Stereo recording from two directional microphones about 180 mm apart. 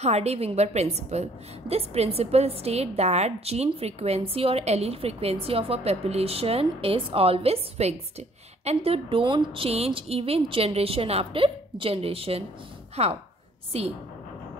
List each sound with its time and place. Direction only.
0.0 s a woman's voice: 35° right (ahead or behind)